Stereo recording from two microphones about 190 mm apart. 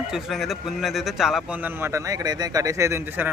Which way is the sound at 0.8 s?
Centre (ahead or behind).